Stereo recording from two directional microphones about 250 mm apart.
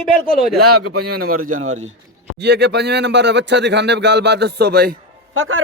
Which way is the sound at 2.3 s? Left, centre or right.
Right.